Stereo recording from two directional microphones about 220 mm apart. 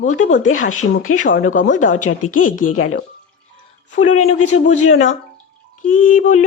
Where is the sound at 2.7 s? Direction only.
75° left (ahead or behind).